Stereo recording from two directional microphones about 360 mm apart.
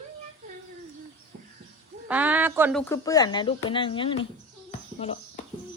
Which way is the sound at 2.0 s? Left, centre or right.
Centre.